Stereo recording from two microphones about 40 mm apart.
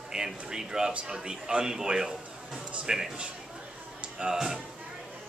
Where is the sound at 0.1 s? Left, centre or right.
Centre.